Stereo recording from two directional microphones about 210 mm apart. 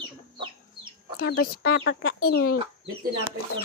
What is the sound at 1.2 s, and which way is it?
Speech, 45° left (ahead or behind).